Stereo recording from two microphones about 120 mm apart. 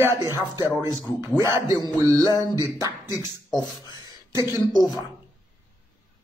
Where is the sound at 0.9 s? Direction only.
35° left (ahead or behind).